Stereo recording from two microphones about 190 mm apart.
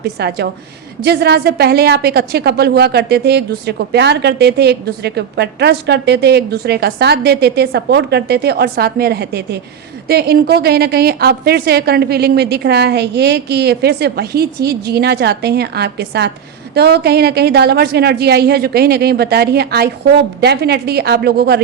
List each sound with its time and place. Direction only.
0.0 s a woman's voice: 60° right (ahead or behind)